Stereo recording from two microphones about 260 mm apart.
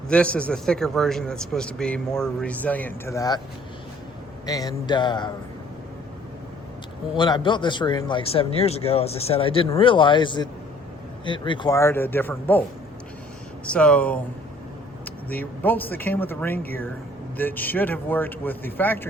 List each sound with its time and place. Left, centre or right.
0.1 s a man's voice: centre
4.4 s speech: centre
7.2 s a man's voice: centre
13.7 s a man's voice: centre